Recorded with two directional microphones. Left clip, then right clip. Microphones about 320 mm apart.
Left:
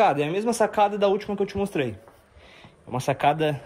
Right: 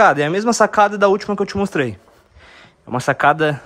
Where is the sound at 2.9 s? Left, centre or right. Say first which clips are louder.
Right 7 dB; centre.